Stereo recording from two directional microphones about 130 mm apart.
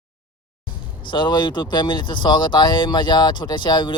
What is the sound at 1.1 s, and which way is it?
Speech, 35° left (ahead or behind).